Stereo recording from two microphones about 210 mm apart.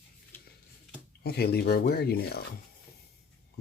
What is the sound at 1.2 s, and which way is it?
Speech, 50° left (ahead or behind).